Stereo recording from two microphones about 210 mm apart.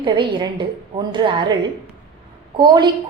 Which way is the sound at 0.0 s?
20° right (ahead or behind).